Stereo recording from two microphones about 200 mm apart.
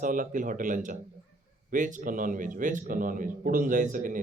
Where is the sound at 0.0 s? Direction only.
40° right (ahead or behind).